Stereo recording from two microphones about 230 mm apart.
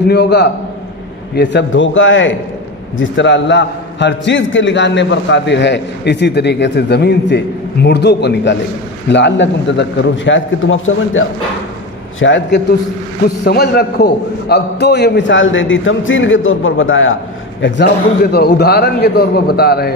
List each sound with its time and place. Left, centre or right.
0.1 s a man's voice: left